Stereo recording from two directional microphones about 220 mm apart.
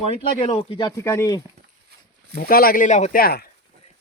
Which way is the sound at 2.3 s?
40° left (ahead or behind).